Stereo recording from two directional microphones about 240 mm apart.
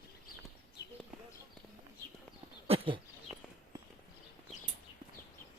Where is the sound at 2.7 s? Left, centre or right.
Right.